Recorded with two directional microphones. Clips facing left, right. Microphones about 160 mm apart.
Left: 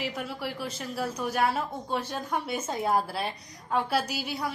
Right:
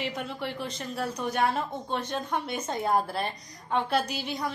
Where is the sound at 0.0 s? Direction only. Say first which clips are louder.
Even; 5° left (ahead or behind).